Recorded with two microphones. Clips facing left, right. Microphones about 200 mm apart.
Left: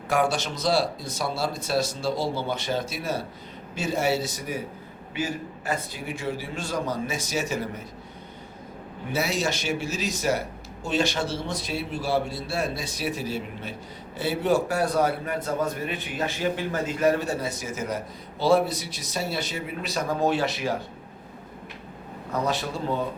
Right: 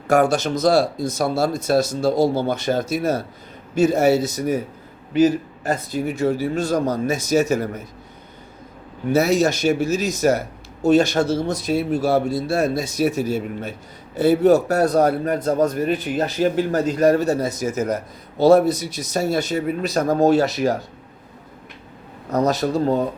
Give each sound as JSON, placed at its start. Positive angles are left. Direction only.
{"t": 0.1, "sound": "speech", "side_deg": -45}
{"t": 9.1, "sound": "a man's voice", "side_deg": -45}
{"t": 22.3, "sound": "a man's voice", "side_deg": -40}